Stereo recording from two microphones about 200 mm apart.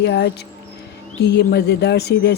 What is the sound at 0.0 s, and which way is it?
Speech, 55° left (ahead or behind).